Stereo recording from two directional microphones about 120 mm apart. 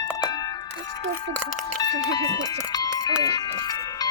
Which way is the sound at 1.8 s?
35° left (ahead or behind).